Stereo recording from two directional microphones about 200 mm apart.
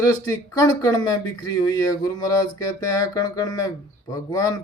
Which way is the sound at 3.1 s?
20° left (ahead or behind).